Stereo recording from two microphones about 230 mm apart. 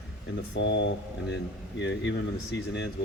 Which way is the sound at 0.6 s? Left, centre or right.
Left.